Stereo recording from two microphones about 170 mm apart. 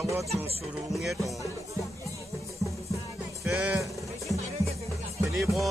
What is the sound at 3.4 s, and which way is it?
Speech, 5° right (ahead or behind).